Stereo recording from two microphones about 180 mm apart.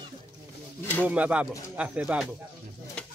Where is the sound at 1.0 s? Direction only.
10° right (ahead or behind).